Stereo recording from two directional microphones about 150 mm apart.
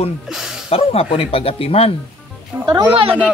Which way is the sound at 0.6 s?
40° left (ahead or behind).